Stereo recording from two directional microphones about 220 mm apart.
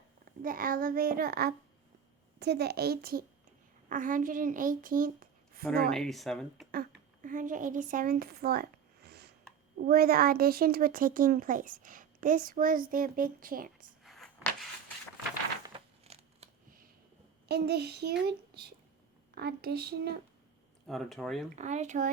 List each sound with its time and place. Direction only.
0.3 s a child's voice: 40° right (ahead or behind)
5.9 s speech: centre (ahead or behind)
6.7 s speech: 40° right (ahead or behind)
14.0 s a sound: centre (ahead or behind)
15.6 s crumpling: 25° right (ahead or behind)
17.5 s a child's voice: 45° right (ahead or behind)
20.8 s speech: centre (ahead or behind)
21.5 s speech: 30° right (ahead or behind)